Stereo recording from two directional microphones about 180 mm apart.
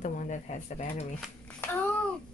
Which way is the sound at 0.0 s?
40° left (ahead or behind).